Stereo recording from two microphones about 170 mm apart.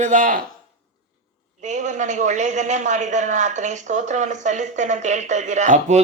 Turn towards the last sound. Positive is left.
turn(degrees=-45)  # may be behind; listen again after turning